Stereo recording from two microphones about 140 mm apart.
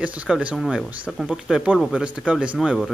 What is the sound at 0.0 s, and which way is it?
Speech, 10° right (ahead or behind).